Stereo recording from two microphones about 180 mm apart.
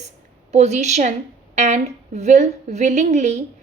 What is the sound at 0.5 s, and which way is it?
A woman's voice, 40° right (ahead or behind).